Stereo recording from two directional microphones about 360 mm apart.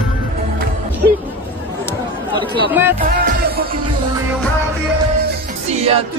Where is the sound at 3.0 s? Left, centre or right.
Right.